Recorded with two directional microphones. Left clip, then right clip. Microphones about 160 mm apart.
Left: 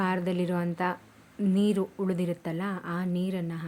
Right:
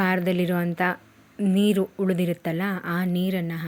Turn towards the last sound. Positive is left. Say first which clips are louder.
# right 5 dB
turn(degrees=-25)  # may be behind; listen again after turning